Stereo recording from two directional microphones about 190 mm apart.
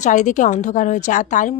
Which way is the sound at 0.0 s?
40° left (ahead or behind).